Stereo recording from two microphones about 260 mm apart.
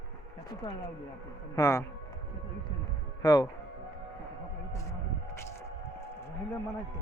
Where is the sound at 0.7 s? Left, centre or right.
Centre.